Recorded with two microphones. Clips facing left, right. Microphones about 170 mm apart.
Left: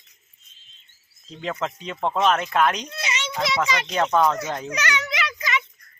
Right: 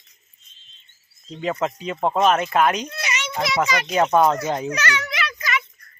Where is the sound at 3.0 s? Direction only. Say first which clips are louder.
Right 1 dB; 30° left (ahead or behind).